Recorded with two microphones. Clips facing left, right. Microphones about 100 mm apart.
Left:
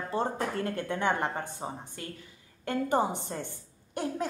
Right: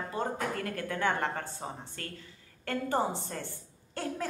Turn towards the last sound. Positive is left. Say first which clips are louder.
# left 3 dB
turn(degrees=20)  # may be behind; listen again after turning